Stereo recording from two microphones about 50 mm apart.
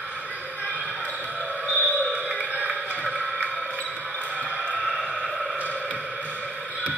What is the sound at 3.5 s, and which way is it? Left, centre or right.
Basketball bounce, left.